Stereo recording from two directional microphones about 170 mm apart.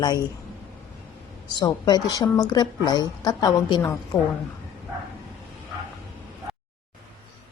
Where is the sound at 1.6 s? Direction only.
25° left (ahead or behind).